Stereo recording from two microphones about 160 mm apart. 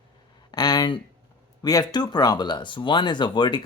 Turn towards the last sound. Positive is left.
turn(degrees=25)  # may be behind; listen again after turning